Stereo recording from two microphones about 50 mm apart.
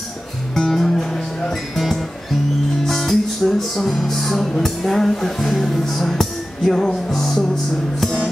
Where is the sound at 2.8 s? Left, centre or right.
Centre.